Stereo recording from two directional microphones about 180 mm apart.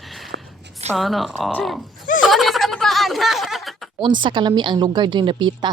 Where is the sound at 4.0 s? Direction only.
25° right (ahead or behind).